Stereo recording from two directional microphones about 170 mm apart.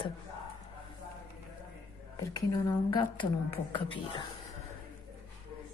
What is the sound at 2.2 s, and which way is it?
A woman's voice, 25° left (ahead or behind).